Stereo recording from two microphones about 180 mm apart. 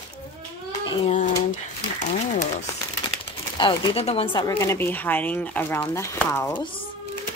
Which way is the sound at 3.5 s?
25° left (ahead or behind).